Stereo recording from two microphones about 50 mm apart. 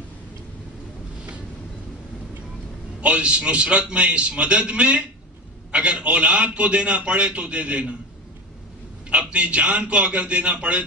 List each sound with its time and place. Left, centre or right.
3.0 s a man's voice: right
9.1 s a man's voice: right